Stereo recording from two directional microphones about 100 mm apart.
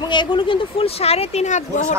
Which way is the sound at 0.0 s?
50° left (ahead or behind).